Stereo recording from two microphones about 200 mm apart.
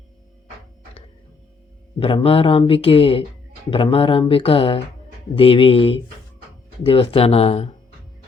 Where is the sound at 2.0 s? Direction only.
25° left (ahead or behind).